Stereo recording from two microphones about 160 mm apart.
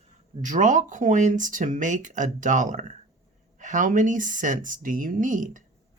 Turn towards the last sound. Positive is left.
turn(degrees=-55)  # may be behind; listen again after turning